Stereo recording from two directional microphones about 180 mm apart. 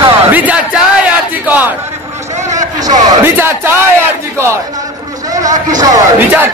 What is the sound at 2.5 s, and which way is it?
Speech, 20° right (ahead or behind).